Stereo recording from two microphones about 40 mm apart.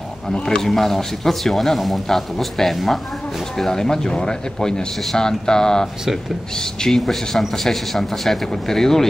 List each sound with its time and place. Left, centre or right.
0.6 s a man's voice: centre
3.5 s speech: centre